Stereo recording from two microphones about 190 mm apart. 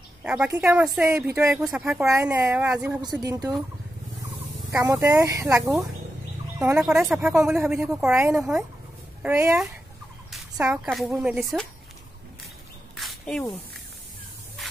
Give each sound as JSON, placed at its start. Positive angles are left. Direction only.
{"t": 0.2, "sound": "a woman's voice", "side_deg": -5}
{"t": 1.7, "sound": "speech", "side_deg": -5}
{"t": 2.0, "sound": "speech", "side_deg": -15}
{"t": 3.0, "sound": "speech", "side_deg": -20}
{"t": 4.7, "sound": "speech", "side_deg": -15}
{"t": 6.8, "sound": "speech", "side_deg": 0}
{"t": 10.7, "sound": "speech", "side_deg": 0}
{"t": 12.9, "sound": "a sound", "side_deg": 0}